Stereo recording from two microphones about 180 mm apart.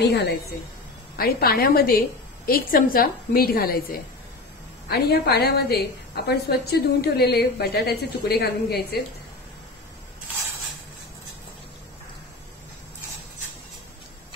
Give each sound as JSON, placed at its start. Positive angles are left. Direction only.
{"t": 0.0, "sound": "a woman's voice", "side_deg": 70}
{"t": 1.1, "sound": "a woman's voice", "side_deg": 60}
{"t": 4.8, "sound": "a woman's voice", "side_deg": 60}